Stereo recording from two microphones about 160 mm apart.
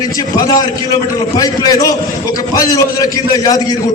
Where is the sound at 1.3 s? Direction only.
20° left (ahead or behind).